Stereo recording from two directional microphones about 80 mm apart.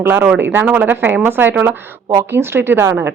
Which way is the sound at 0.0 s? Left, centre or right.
Right.